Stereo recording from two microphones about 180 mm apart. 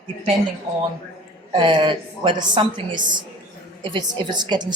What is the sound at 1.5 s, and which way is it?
A woman's voice, 30° right (ahead or behind).